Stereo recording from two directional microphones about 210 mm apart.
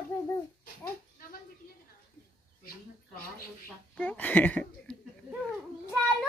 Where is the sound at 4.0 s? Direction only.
10° left (ahead or behind).